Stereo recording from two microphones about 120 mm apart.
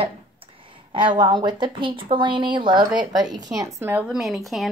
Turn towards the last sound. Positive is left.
turn(degrees=0)  # may be behind; listen again after turning